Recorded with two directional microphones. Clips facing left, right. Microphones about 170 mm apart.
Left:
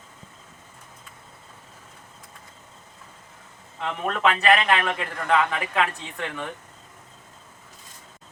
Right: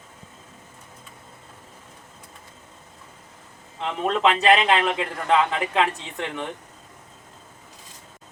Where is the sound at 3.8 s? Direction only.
25° right (ahead or behind).